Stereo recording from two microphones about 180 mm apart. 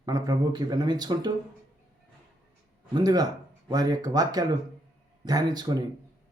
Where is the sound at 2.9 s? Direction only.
20° right (ahead or behind).